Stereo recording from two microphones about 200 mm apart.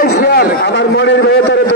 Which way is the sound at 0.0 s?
50° left (ahead or behind).